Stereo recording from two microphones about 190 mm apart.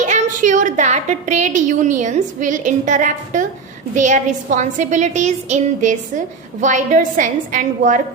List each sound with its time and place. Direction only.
0.0 s a woman's voice: 40° right (ahead or behind)